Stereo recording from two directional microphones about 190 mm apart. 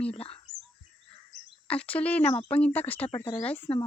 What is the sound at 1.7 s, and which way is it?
Speech, 5° left (ahead or behind).